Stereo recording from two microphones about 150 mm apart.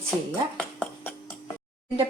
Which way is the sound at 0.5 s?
10° left (ahead or behind).